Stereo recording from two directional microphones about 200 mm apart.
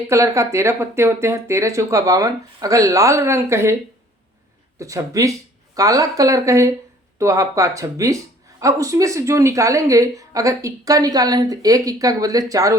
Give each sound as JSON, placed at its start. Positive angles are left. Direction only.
{"t": 0.1, "sound": "a woman's voice", "side_deg": -15}
{"t": 4.8, "sound": "a woman's voice", "side_deg": -15}